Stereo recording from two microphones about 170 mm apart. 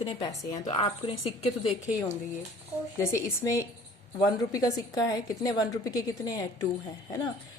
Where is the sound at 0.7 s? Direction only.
35° left (ahead or behind).